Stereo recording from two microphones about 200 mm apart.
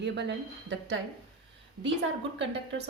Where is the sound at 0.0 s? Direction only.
60° right (ahead or behind).